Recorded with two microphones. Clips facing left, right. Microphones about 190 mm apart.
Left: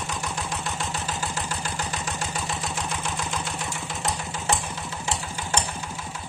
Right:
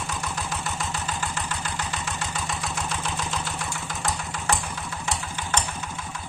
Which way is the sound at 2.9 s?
10° left (ahead or behind).